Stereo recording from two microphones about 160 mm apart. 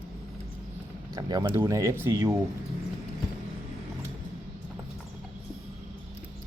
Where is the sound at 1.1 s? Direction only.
25° right (ahead or behind).